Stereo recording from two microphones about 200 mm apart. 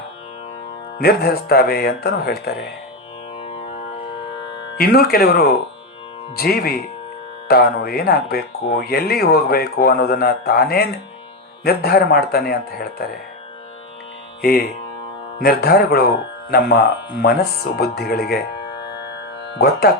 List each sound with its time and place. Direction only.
0.9 s speech: 50° left (ahead or behind)
4.8 s speech: 50° left (ahead or behind)
14.4 s speech: 50° left (ahead or behind)
19.5 s speech: 50° left (ahead or behind)